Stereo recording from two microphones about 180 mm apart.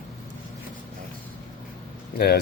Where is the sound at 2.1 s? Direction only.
60° left (ahead or behind).